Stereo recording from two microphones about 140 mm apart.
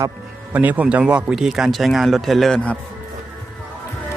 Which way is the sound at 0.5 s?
10° right (ahead or behind).